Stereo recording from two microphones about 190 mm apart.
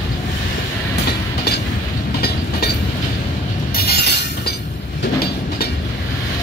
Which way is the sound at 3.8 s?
55° left (ahead or behind).